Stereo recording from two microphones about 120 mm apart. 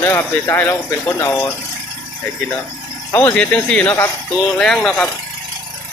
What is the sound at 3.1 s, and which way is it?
Speech, 25° left (ahead or behind).